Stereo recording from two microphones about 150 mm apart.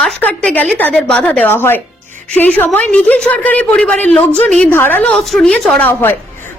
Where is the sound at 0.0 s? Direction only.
10° left (ahead or behind).